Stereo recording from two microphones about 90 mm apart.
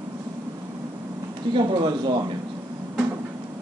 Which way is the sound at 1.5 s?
65° right (ahead or behind).